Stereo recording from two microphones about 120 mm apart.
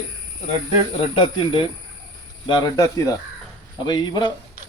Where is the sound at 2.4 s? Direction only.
40° left (ahead or behind).